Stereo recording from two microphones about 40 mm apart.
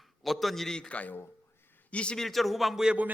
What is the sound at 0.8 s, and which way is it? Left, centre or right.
A man's voice, left.